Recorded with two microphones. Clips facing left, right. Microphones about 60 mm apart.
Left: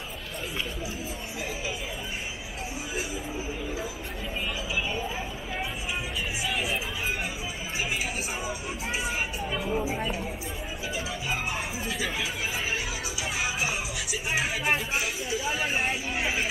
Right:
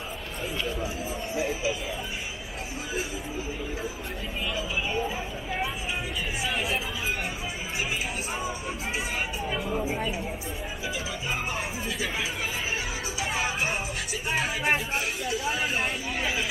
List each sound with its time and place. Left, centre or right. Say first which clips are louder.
6.5 s music: right 1 dB; centre
9.5 s a sound: left 1 dB; centre
13.2 s music: right 2 dB; right
14.3 s speech: right 1 dB; centre